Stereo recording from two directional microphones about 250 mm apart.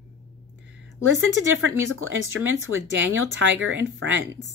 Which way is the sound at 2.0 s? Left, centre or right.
Right.